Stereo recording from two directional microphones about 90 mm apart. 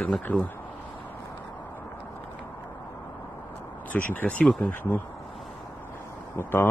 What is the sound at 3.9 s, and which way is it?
Speech, 15° left (ahead or behind).